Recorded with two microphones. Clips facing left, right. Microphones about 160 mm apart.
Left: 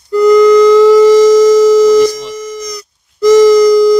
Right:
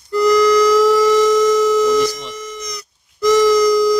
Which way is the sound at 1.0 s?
35° left (ahead or behind).